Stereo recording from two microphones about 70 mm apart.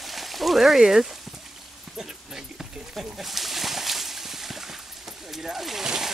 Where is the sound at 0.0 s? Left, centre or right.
Centre.